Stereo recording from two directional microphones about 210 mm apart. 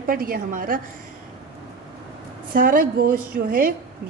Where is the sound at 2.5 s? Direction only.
40° right (ahead or behind).